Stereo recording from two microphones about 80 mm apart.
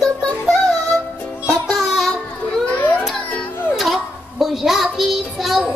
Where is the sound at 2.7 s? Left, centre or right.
Left.